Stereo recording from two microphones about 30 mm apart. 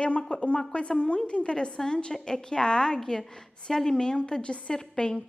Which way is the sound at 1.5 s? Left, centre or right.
Left.